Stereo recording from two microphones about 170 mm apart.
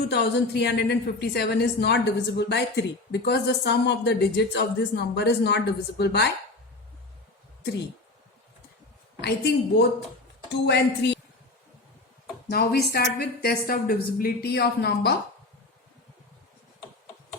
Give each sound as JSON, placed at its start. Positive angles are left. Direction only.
{"t": 0.1, "sound": "a woman's voice", "side_deg": 75}
{"t": 9.2, "sound": "a woman's voice", "side_deg": 75}
{"t": 10.5, "sound": "a woman's voice", "side_deg": 90}
{"t": 12.5, "sound": "a woman's voice", "side_deg": 65}